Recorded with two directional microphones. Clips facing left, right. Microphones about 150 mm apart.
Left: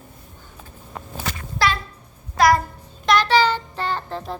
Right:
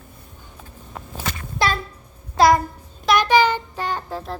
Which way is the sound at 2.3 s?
25° right (ahead or behind).